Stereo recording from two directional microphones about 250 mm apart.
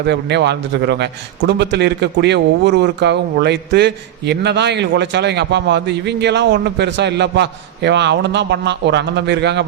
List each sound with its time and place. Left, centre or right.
0.1 s a man's voice: right